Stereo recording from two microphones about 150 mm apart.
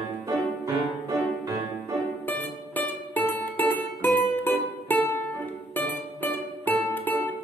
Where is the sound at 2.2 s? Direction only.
10° left (ahead or behind).